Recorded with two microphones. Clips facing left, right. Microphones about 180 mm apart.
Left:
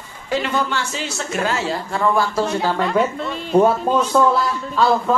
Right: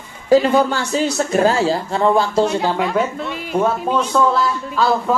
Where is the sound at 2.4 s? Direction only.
5° right (ahead or behind).